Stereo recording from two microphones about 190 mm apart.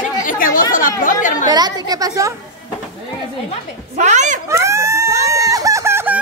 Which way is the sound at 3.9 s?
40° right (ahead or behind).